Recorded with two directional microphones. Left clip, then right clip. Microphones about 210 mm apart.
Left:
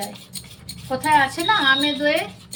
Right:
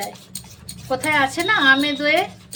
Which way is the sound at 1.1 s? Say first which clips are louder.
Left 1 dB; 45° right (ahead or behind).